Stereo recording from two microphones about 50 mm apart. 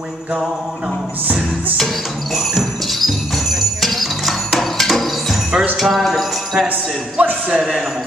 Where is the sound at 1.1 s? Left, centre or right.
Right.